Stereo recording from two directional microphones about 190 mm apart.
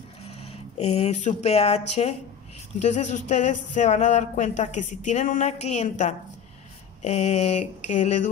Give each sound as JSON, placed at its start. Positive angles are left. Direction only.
{"t": 0.4, "sound": "speech", "side_deg": 35}